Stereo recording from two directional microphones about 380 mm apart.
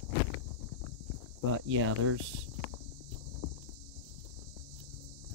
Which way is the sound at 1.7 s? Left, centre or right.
Right.